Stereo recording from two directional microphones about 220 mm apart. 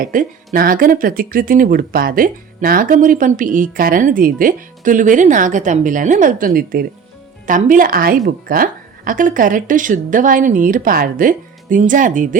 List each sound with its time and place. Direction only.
0.0 s speech: 40° right (ahead or behind)